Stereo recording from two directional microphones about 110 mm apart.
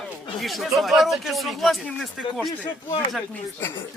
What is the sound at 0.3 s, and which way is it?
Speech, centre (ahead or behind).